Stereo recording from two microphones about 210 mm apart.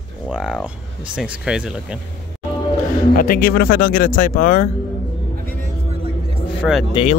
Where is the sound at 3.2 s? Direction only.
45° left (ahead or behind).